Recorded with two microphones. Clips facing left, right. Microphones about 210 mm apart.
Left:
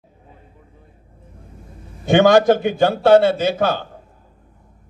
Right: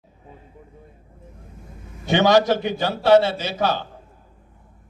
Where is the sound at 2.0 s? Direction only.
50° left (ahead or behind).